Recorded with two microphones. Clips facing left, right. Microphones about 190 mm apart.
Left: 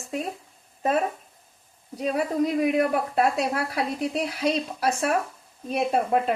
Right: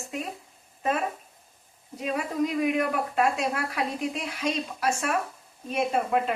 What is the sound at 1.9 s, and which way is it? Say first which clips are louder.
Speech: left 4 dB; 35° left (ahead or behind).